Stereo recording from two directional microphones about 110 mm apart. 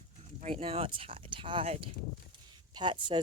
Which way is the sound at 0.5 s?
55° right (ahead or behind).